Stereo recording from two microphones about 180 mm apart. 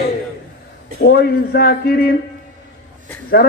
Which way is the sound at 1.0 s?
60° left (ahead or behind).